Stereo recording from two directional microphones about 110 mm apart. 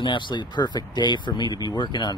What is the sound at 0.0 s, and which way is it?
Speech, 45° left (ahead or behind).